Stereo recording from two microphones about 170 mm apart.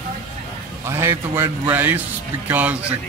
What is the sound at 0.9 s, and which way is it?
Speech, 15° right (ahead or behind).